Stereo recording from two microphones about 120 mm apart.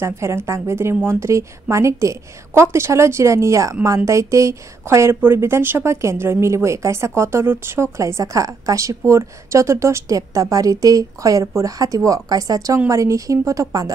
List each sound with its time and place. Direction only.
0.0 s a woman's voice: 20° right (ahead or behind)